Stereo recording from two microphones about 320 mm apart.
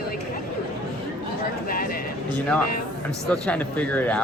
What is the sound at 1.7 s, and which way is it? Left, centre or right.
Speech, left.